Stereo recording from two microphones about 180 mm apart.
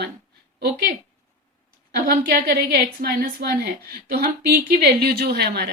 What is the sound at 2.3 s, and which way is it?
A woman's voice, 55° right (ahead or behind).